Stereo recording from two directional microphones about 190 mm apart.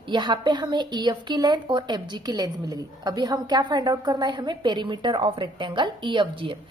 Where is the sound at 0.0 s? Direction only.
25° right (ahead or behind).